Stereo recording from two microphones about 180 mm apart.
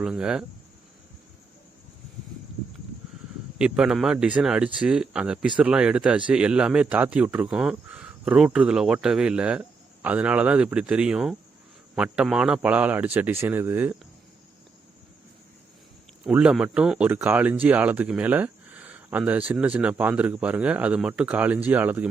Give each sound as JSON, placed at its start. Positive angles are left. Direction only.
{"t": 0.0, "sound": "speech", "side_deg": -5}
{"t": 3.6, "sound": "speech", "side_deg": -5}
{"t": 16.2, "sound": "speech", "side_deg": -5}